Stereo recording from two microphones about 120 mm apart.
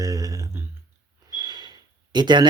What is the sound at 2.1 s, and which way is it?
Speech, 35° right (ahead or behind).